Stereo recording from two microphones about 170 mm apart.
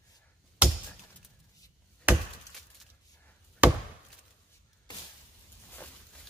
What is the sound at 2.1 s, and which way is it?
Chop, 10° right (ahead or behind).